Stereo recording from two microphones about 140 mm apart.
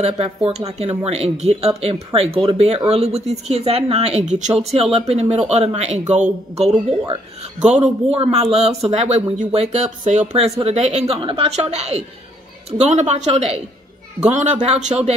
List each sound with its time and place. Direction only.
0.0 s a woman's voice: 45° right (ahead or behind)
11.1 s a woman's voice: 40° right (ahead or behind)